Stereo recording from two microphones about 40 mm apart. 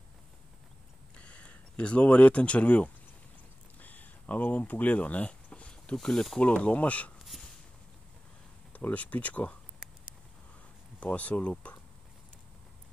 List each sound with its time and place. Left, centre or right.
1.1 s speech: left
3.8 s a sound: left
6.4 s speech: left
7.3 s a sound: centre
8.9 s speech: left
11.0 s speech: left